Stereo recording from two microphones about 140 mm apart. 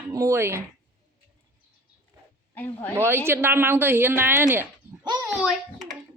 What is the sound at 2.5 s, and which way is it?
Speech, 10° left (ahead or behind).